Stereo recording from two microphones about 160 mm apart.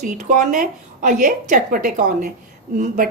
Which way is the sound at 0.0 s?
50° right (ahead or behind).